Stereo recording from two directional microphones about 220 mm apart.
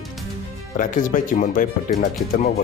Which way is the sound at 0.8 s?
35° left (ahead or behind).